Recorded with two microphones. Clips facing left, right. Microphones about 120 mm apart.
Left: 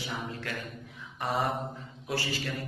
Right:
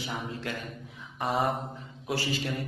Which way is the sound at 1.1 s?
25° right (ahead or behind).